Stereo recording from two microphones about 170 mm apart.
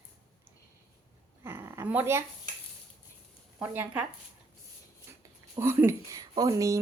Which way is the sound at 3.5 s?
10° right (ahead or behind).